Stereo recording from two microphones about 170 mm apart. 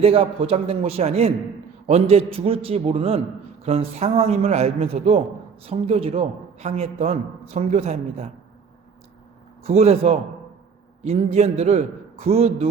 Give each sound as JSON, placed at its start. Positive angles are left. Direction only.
{"t": 0.0, "sound": "a man's voice", "side_deg": -35}
{"t": 9.6, "sound": "a man's voice", "side_deg": -35}